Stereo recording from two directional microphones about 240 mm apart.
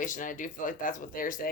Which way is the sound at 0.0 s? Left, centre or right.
Left.